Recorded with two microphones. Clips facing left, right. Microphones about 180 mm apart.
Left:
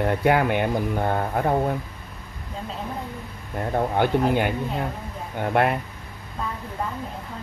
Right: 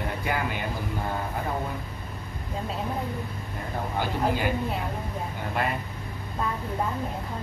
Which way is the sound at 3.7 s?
60° left (ahead or behind).